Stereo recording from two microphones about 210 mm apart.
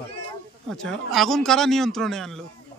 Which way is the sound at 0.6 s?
Centre (ahead or behind).